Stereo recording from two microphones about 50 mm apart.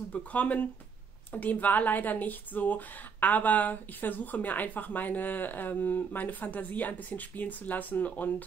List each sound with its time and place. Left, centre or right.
0.1 s speech: left